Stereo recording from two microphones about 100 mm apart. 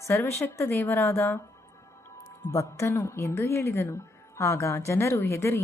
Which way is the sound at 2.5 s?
30° left (ahead or behind).